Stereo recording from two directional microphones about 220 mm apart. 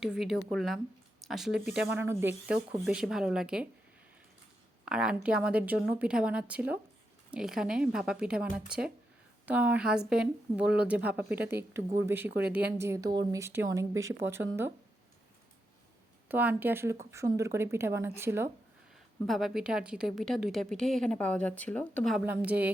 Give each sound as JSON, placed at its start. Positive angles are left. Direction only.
{"t": 0.0, "sound": "a woman's voice", "side_deg": 0}
{"t": 4.9, "sound": "a woman's voice", "side_deg": -5}
{"t": 16.3, "sound": "speech", "side_deg": -10}
{"t": 18.9, "sound": "a woman's voice", "side_deg": 0}